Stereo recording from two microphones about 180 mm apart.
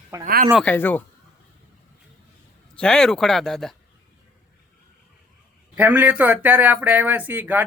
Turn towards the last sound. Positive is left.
turn(degrees=-10)  # may be behind; listen again after turning